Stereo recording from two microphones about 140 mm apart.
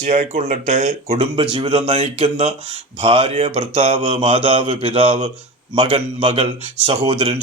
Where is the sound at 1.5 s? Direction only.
45° right (ahead or behind).